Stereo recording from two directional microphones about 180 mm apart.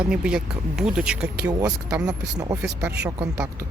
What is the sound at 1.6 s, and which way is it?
Speech, 20° right (ahead or behind).